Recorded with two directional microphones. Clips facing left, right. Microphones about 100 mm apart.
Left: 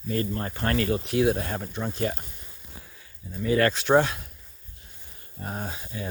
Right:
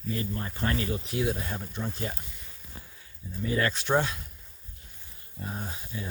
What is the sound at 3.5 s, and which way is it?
Speech, 80° left.